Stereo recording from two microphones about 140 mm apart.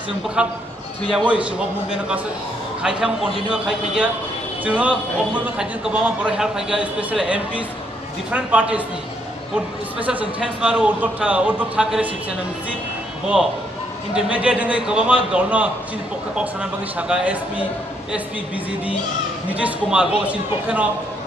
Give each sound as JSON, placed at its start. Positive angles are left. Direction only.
{"t": 0.4, "sound": "a man's voice", "side_deg": -5}
{"t": 9.9, "sound": "a man's voice", "side_deg": -10}
{"t": 14.1, "sound": "a man's voice", "side_deg": -10}
{"t": 16.9, "sound": "a man's voice", "side_deg": -10}
{"t": 19.5, "sound": "a man's voice", "side_deg": -10}